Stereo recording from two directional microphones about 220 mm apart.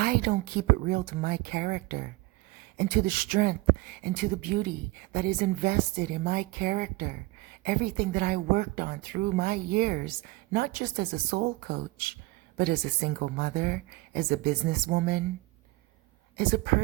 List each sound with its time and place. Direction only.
0.0 s speech: 45° right (ahead or behind)
16.4 s speech: 40° right (ahead or behind)